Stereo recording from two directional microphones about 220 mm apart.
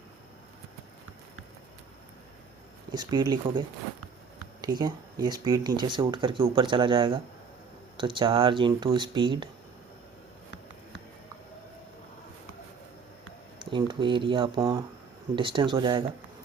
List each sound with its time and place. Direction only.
2.9 s speech: 20° right (ahead or behind)
4.6 s speech: 20° right (ahead or behind)
13.7 s speech: 20° right (ahead or behind)